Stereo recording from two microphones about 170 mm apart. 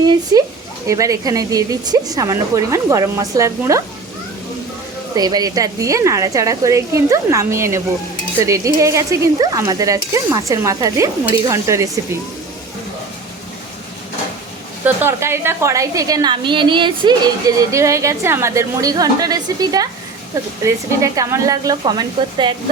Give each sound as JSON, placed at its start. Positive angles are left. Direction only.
{"t": 0.0, "sound": "speech", "side_deg": -25}
{"t": 5.1, "sound": "speech", "side_deg": -20}
{"t": 14.8, "sound": "speech", "side_deg": -15}
{"t": 17.6, "sound": "speech", "side_deg": -20}